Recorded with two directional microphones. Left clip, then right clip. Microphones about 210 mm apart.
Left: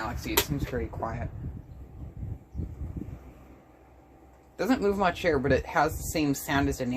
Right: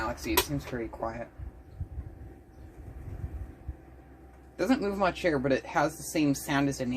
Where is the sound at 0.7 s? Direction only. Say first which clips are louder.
Left 3 dB; 25° left (ahead or behind).